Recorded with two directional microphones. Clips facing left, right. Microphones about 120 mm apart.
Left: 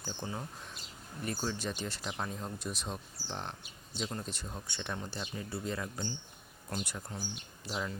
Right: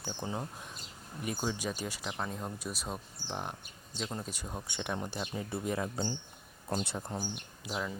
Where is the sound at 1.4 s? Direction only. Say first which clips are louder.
Right 2 dB; 10° right (ahead or behind); by 7.1 s 25° right (ahead or behind).